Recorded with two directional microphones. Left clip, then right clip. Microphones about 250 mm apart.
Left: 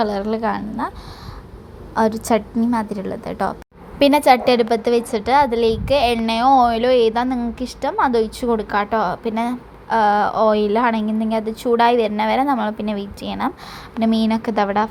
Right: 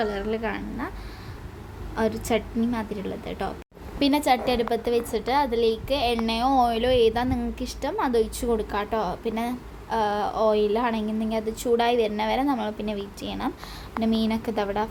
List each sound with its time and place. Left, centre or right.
0.0 s a woman's voice: left
2.0 s a woman's voice: left